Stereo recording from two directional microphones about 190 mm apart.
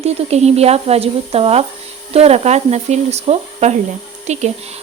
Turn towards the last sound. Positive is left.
turn(degrees=-35)  # may be behind; listen again after turning